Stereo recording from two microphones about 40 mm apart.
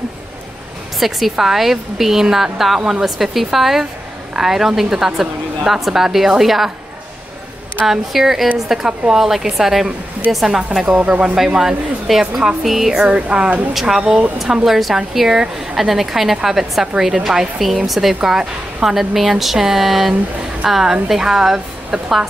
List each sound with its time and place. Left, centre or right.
0.9 s a woman's voice: centre
7.8 s a woman's voice: centre
11.0 s speech: right
11.3 s a woman's voice: centre
13.0 s speech: right
13.7 s a woman's voice: centre
18.4 s a woman's voice: centre
18.9 s a woman's voice: centre